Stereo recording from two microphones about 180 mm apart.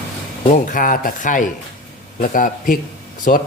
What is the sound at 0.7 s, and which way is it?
Speech, 50° left (ahead or behind).